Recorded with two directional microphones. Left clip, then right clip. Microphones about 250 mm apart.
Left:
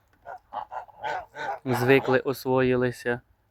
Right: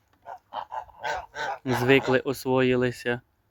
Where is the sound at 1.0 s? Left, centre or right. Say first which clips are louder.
Even; right.